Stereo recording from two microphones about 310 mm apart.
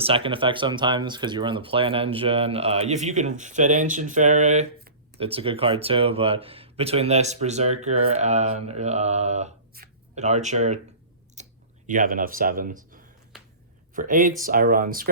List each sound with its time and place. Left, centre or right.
0.0 s speech: centre
11.4 s clicking: right
11.9 s speech: right